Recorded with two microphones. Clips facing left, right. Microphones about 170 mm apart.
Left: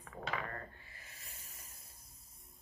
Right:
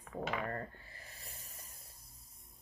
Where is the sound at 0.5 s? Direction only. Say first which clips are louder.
Right 5 dB; 35° right (ahead or behind).